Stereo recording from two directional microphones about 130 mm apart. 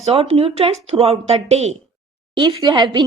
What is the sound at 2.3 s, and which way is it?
Speech, 40° right (ahead or behind).